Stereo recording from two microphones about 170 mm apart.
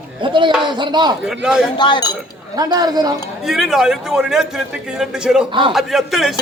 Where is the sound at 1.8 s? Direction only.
25° left (ahead or behind).